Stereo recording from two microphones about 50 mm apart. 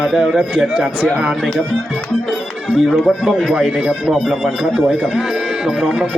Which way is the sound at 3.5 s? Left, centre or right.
Centre.